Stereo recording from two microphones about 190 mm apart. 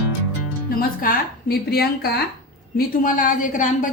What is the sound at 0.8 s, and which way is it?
A woman's voice, 50° left (ahead or behind).